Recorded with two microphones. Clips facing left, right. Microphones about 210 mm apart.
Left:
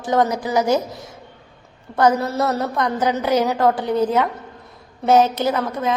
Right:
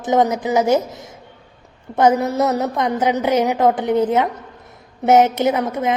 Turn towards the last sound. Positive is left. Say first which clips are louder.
# right 2 dB
turn(degrees=-20)  # may be behind; listen again after turning